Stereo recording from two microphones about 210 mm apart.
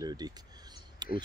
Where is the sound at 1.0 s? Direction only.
20° right (ahead or behind).